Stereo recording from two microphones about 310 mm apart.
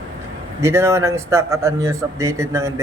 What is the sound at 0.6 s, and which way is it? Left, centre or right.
Speech, centre.